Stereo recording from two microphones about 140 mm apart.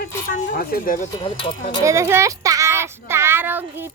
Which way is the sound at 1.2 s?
50° left (ahead or behind).